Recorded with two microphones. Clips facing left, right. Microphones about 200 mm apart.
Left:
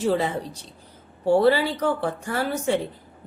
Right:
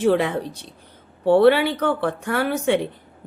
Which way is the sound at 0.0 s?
65° right (ahead or behind).